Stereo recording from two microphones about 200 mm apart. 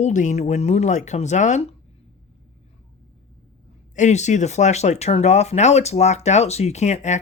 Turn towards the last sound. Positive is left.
turn(degrees=35)  # may be behind; listen again after turning